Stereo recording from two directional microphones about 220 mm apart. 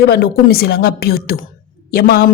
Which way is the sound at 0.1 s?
45° left (ahead or behind).